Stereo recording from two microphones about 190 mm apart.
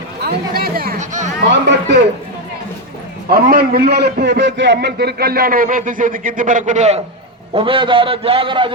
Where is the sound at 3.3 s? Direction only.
50° right (ahead or behind).